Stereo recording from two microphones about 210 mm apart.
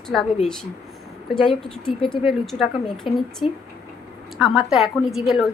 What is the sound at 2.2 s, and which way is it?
A woman's voice, centre (ahead or behind).